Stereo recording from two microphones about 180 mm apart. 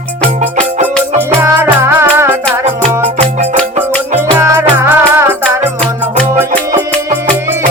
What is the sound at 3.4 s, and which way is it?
Music, 40° right (ahead or behind).